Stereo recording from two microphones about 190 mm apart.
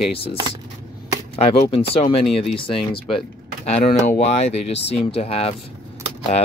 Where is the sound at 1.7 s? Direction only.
30° left (ahead or behind).